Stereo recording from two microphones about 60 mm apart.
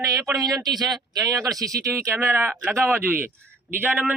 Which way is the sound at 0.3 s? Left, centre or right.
Right.